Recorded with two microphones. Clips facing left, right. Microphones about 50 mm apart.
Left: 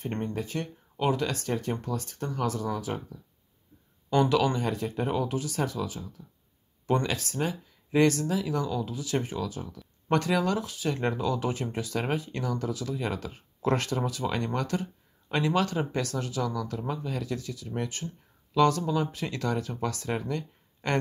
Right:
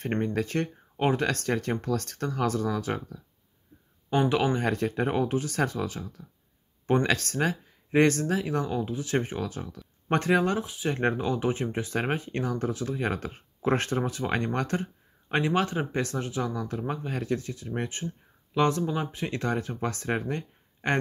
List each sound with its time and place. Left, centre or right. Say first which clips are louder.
0.2 s speech: right 4 dB; right
4.1 s speech: left 1 dB; right
4.6 s speech: right 3 dB; right
10.0 s speech: right 2 dB; right
10.6 s speech: right 1 dB; right
11.0 s speech: right 2 dB; right